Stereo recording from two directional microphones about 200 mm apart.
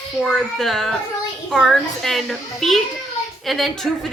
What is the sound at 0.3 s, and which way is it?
A woman's voice, centre (ahead or behind).